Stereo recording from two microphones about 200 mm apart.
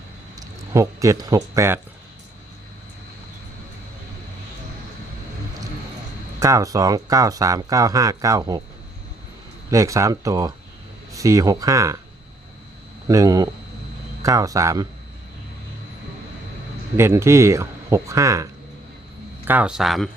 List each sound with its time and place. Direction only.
0.3 s speech: 15° right (ahead or behind)
6.4 s speech: 15° right (ahead or behind)
9.6 s speech: 15° right (ahead or behind)
13.1 s speech: 15° right (ahead or behind)
17.0 s speech: 15° right (ahead or behind)
19.5 s speech: 5° right (ahead or behind)